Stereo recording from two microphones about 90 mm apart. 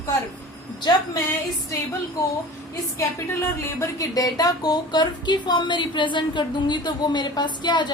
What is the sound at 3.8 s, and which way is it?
Speech, 40° left (ahead or behind).